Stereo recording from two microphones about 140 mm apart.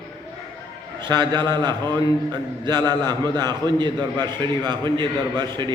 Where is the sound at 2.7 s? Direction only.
30° right (ahead or behind).